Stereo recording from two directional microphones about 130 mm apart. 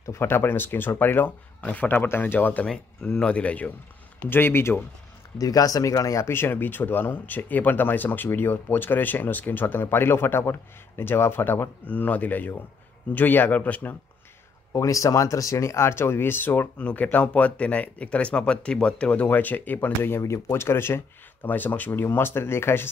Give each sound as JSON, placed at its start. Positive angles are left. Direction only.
{"t": 0.0, "sound": "speech", "side_deg": 20}
{"t": 14.7, "sound": "speech", "side_deg": 25}